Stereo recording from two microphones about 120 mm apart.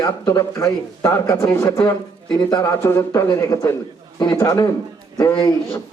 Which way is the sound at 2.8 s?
25° left (ahead or behind).